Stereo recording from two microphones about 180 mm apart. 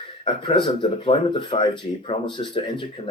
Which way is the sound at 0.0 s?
30° left (ahead or behind).